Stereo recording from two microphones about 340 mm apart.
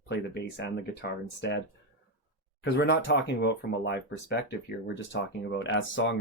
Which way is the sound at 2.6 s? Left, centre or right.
Left.